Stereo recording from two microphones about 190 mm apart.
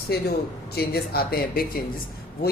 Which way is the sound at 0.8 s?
55° left (ahead or behind).